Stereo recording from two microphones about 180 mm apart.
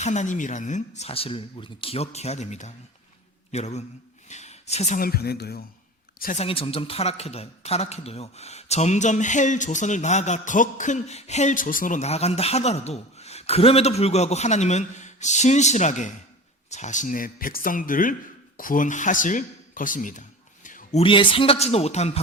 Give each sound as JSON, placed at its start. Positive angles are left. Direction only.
{"t": 0.0, "sound": "speech", "side_deg": 40}
{"t": 4.9, "sound": "speech", "side_deg": 55}
{"t": 6.3, "sound": "a man's voice", "side_deg": 30}
{"t": 20.7, "sound": "a sound", "side_deg": 45}
{"t": 21.0, "sound": "speech", "side_deg": 30}